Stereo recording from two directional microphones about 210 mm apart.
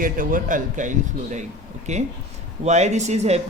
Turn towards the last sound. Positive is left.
turn(degrees=-30)  # may be behind; listen again after turning